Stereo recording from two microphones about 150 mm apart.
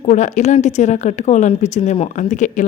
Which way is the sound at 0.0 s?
50° left (ahead or behind).